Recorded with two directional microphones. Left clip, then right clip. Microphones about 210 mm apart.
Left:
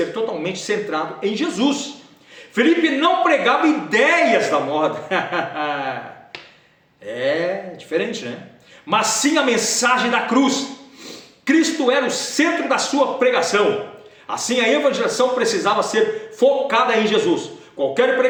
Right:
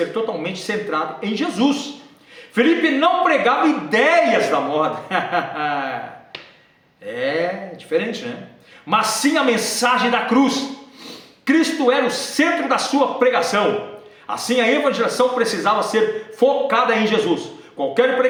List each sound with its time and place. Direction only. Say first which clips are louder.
0.1 s a man's voice: even; 15° right (ahead or behind)
7.1 s a man's voice: left 1 dB; 10° right (ahead or behind)